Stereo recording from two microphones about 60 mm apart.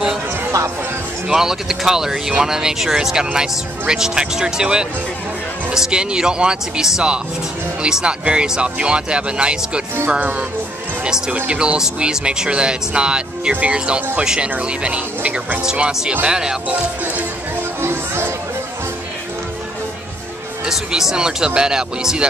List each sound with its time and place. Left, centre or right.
1.3 s speech: centre; by 10.4 s right
11.1 s speech: centre
17.8 s chatter: right
20.6 s speech: centre